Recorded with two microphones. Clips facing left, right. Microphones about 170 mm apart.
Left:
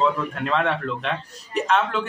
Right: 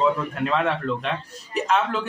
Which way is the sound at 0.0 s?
Centre (ahead or behind).